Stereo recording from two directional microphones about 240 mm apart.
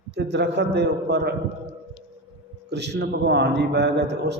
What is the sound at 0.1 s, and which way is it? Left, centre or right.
A man's voice, right.